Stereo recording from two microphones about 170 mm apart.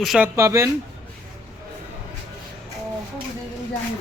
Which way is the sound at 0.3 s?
15° right (ahead or behind).